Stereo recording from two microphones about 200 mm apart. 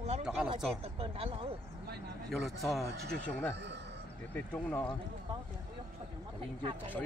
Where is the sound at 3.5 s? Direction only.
60° right (ahead or behind).